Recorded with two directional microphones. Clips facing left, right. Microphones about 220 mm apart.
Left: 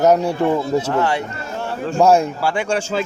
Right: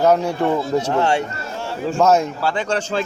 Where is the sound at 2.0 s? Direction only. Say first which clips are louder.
Left 2 dB; 10° left (ahead or behind).